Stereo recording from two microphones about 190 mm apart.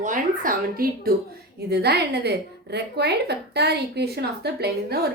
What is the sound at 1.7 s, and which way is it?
A woman's voice, 60° right (ahead or behind).